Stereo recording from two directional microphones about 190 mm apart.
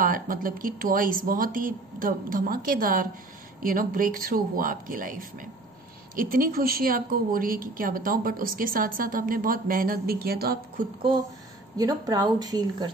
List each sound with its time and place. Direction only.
0.0 s a woman's voice: 45° right (ahead or behind)
11.0 s speech: 25° right (ahead or behind)